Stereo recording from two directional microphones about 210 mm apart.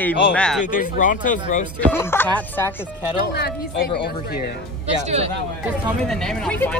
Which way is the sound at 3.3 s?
50° left (ahead or behind).